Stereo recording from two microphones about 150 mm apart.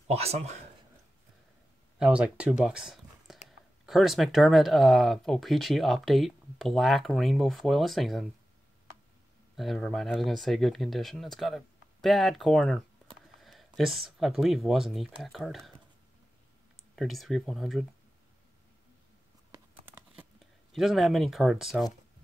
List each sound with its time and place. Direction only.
0.1 s speech: 45° right (ahead or behind)
2.0 s speech: 5° right (ahead or behind)
2.6 s a sound: 5° right (ahead or behind)
3.8 s speech: centre (ahead or behind)
9.6 s speech: 5° left (ahead or behind)
16.9 s speech: centre (ahead or behind)
19.5 s computer keyboard: 25° right (ahead or behind)
20.7 s speech: centre (ahead or behind)